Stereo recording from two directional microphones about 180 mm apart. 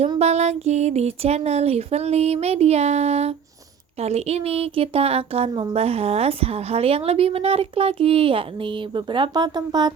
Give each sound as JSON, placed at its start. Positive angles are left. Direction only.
{"t": 0.2, "sound": "speech", "side_deg": -40}